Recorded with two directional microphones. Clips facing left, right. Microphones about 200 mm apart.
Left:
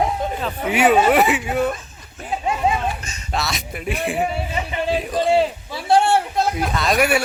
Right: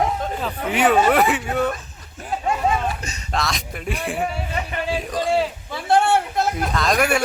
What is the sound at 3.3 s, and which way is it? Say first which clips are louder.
Speech: even; 5° left (ahead or behind).